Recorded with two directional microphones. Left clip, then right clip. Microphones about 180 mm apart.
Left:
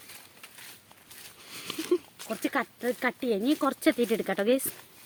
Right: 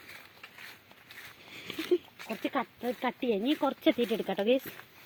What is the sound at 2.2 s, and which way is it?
Speech, 40° left (ahead or behind).